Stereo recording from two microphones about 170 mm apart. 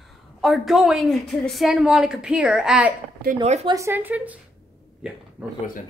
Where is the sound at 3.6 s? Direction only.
20° right (ahead or behind).